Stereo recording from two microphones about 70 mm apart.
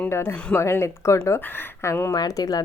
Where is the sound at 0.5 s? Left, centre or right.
Left.